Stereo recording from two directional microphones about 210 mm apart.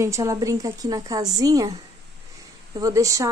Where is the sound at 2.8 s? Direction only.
15° right (ahead or behind).